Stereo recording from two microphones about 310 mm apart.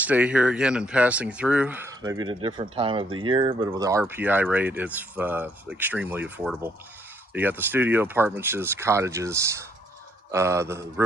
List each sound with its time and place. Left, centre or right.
0.0 s speech: centre